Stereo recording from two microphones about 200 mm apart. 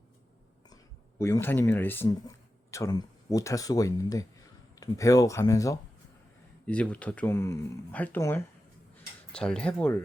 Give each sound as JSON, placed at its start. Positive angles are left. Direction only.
{"t": 1.2, "sound": "speech", "side_deg": 10}